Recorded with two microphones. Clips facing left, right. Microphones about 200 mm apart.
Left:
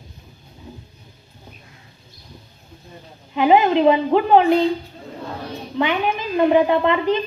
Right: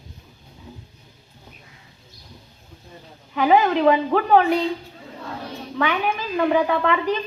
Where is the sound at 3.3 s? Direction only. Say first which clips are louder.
Left 3 dB; 20° left (ahead or behind).